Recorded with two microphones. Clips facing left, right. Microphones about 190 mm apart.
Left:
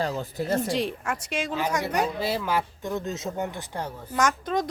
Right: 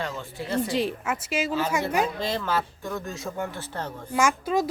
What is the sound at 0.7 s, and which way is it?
Speech, centre (ahead or behind).